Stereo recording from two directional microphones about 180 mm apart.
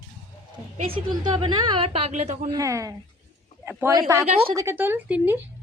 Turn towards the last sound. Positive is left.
turn(degrees=-10)  # may be behind; listen again after turning